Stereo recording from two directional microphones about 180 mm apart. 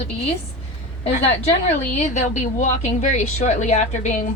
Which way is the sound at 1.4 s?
40° left (ahead or behind).